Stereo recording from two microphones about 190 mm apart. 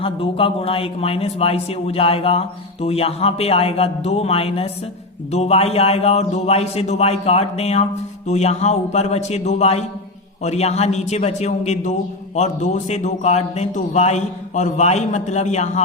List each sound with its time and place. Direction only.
0.0 s a man's voice: 30° left (ahead or behind)